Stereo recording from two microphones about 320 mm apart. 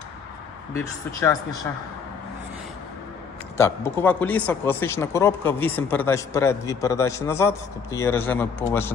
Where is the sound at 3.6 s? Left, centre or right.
Centre.